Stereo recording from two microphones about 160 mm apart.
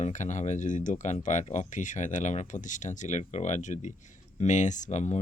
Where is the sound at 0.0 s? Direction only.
50° left (ahead or behind).